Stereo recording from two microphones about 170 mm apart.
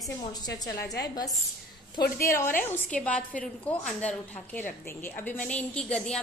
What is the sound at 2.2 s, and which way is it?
A woman's voice, 15° left (ahead or behind).